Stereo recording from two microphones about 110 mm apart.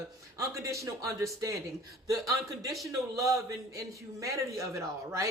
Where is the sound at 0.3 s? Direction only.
30° right (ahead or behind).